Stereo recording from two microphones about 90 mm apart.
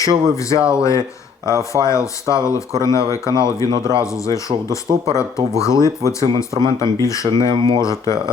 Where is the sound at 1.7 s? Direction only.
35° left (ahead or behind).